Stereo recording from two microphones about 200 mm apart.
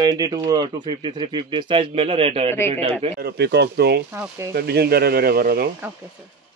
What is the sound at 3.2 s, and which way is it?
Speech, 55° right (ahead or behind).